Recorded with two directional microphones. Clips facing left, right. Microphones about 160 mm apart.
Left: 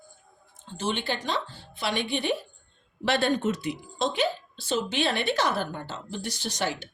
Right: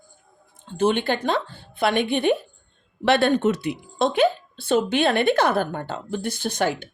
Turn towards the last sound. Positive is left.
turn(degrees=-55)  # may be behind; listen again after turning